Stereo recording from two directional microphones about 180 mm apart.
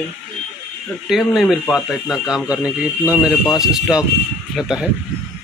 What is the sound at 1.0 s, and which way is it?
Speech, centre (ahead or behind).